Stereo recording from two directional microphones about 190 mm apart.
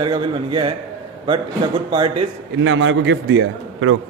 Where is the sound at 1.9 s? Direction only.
25° right (ahead or behind).